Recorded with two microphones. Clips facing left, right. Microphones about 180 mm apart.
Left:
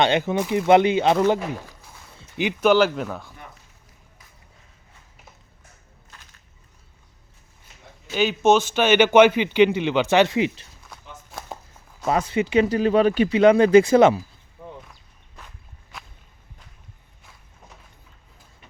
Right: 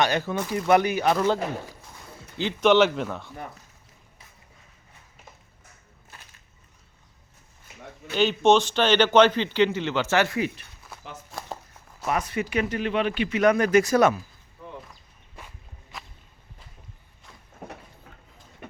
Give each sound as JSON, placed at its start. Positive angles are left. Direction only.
{"t": 0.0, "sound": "speech", "side_deg": 20}
{"t": 2.4, "sound": "a man's voice", "side_deg": 10}
{"t": 2.6, "sound": "speech", "side_deg": 0}
{"t": 8.1, "sound": "a man's voice", "side_deg": 5}
{"t": 10.9, "sound": "walk", "side_deg": -5}
{"t": 11.3, "sound": "a sound", "side_deg": 0}
{"t": 12.0, "sound": "speech", "side_deg": 30}
{"t": 15.4, "sound": "walk", "side_deg": -5}